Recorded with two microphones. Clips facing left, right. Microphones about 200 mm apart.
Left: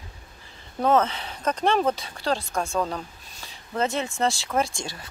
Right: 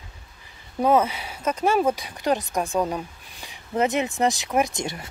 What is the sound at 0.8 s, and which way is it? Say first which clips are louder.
A woman's voice: right 1 dB; 10° right (ahead or behind).